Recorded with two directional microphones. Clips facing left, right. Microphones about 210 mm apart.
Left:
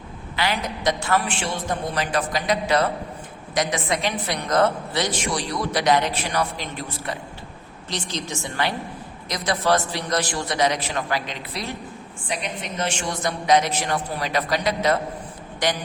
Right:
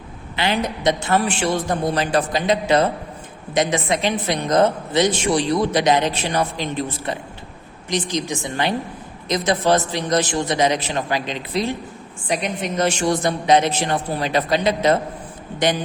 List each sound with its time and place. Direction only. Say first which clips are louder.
0.3 s a woman's voice: right 4 dB; 25° right (ahead or behind)
1.4 s a woman's voice: right 6 dB; 35° right (ahead or behind)
12.3 s a woman's voice: right 7 dB; 40° right (ahead or behind); by 15.8 s 25° right (ahead or behind)